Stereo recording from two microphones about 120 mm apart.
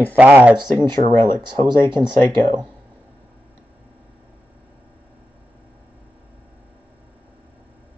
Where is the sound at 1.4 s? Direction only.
35° right (ahead or behind).